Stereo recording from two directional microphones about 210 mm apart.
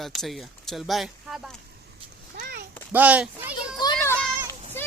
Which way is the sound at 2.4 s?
45° right (ahead or behind).